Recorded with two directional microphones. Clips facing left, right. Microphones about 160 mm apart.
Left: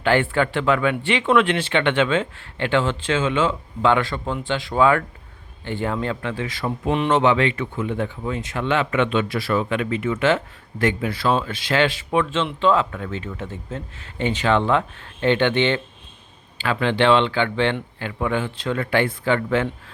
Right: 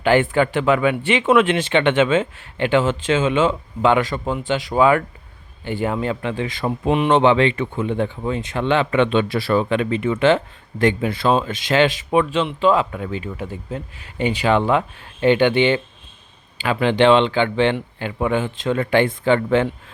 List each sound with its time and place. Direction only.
0.0 s speech: 15° right (ahead or behind)